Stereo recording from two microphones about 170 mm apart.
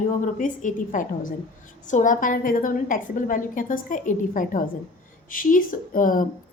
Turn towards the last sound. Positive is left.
turn(degrees=55)  # may be behind; listen again after turning